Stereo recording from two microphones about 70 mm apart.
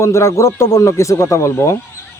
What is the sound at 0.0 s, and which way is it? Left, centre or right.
Speech, left.